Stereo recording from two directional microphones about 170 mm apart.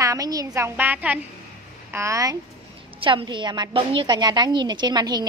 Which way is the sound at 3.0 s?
30° right (ahead or behind).